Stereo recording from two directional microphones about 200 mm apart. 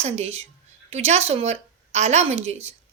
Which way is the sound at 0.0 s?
30° right (ahead or behind).